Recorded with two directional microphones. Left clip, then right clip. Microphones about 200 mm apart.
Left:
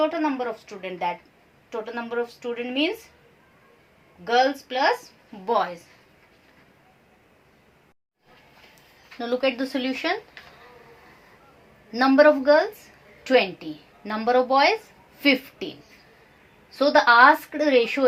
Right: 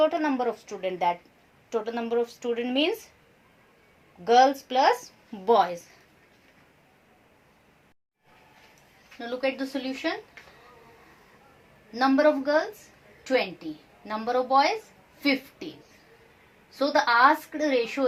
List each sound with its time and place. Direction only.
0.0 s a woman's voice: 45° right (ahead or behind)
4.2 s a woman's voice: 45° right (ahead or behind)
9.1 s a woman's voice: 40° left (ahead or behind)
11.9 s a woman's voice: 40° left (ahead or behind)
14.3 s a woman's voice: 40° left (ahead or behind)
16.7 s a woman's voice: 40° left (ahead or behind)